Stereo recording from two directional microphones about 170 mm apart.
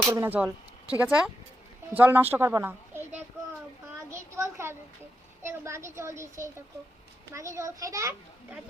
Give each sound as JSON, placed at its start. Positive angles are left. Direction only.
{"t": 0.0, "sound": "a woman's voice", "side_deg": -15}